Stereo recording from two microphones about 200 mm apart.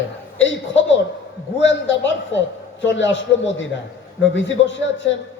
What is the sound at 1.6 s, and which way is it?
A man's voice, 65° left (ahead or behind).